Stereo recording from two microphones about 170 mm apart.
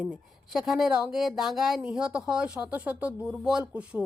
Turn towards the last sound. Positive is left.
turn(degrees=-5)  # may be behind; listen again after turning